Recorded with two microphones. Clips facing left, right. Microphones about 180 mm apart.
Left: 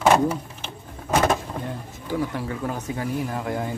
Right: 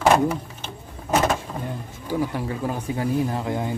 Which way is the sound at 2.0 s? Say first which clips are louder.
Right 1 dB; 15° right (ahead or behind).